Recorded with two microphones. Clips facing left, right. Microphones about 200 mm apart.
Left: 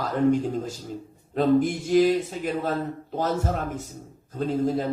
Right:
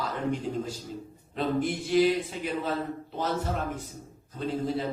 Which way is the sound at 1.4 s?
45° left (ahead or behind).